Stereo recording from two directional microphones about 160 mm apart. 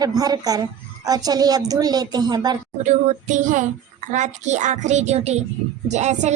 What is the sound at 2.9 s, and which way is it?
Speech, 50° right (ahead or behind).